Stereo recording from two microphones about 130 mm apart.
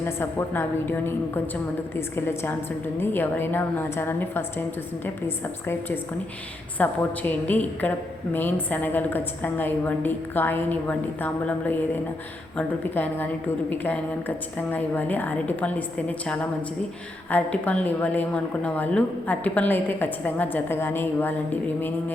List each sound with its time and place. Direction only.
0.0 s a woman's voice: 15° left (ahead or behind)
6.7 s a woman's voice: 15° left (ahead or behind)